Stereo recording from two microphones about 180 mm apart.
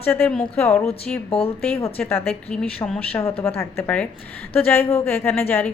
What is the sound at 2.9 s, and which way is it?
A woman's voice, 10° left (ahead or behind).